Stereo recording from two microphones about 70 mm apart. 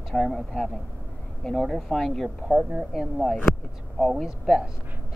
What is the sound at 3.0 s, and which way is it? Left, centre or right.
Speech, centre.